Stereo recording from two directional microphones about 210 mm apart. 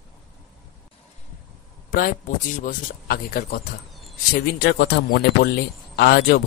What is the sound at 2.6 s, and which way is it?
Speech, 40° left (ahead or behind).